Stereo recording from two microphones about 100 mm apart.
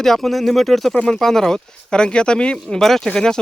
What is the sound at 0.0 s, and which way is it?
Speech, 5° left (ahead or behind).